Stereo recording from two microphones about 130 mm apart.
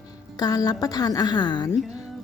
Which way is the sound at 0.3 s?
30° left (ahead or behind).